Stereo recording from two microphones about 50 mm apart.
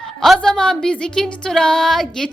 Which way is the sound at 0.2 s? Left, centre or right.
Centre.